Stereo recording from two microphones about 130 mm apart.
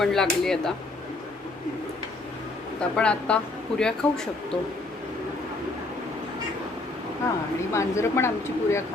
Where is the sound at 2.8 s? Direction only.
10° left (ahead or behind).